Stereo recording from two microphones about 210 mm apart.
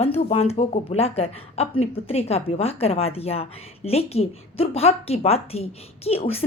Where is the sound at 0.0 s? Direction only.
30° left (ahead or behind).